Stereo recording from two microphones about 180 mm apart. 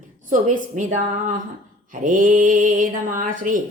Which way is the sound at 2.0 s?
45° right (ahead or behind).